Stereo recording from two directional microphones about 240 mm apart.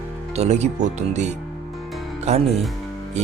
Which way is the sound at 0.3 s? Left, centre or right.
Right.